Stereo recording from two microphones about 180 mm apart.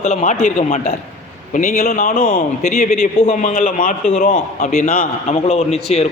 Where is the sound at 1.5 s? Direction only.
55° left (ahead or behind); by 5.8 s 35° left (ahead or behind).